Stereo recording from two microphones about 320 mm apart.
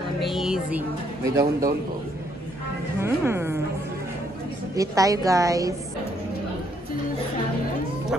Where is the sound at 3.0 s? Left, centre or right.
Centre.